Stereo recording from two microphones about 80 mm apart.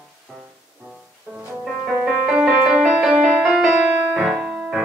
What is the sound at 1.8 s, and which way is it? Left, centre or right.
Music, centre.